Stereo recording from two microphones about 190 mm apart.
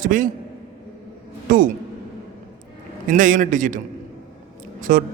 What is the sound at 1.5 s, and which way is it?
Speech, 45° right (ahead or behind).